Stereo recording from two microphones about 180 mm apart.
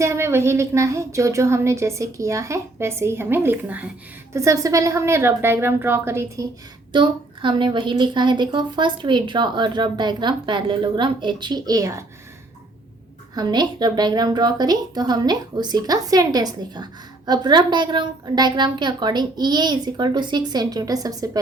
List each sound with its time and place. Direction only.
0.0 s a woman's voice: 15° right (ahead or behind)
13.3 s a woman's voice: 25° right (ahead or behind)